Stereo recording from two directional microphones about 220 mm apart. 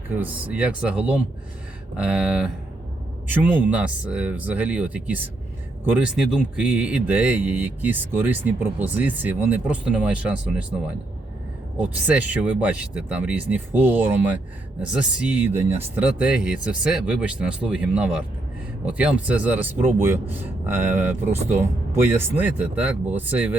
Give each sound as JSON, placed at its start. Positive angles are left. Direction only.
{"t": 0.1, "sound": "speech", "side_deg": -5}
{"t": 11.8, "sound": "speech", "side_deg": -5}
{"t": 21.2, "sound": "speech", "side_deg": -30}
{"t": 21.6, "sound": "speech", "side_deg": -10}